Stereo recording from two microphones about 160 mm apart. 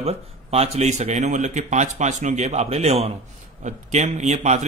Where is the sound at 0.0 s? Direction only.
40° right (ahead or behind).